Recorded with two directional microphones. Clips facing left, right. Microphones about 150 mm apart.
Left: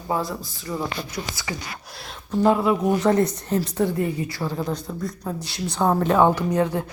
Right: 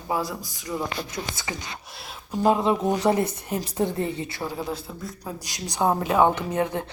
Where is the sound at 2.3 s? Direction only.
20° right (ahead or behind).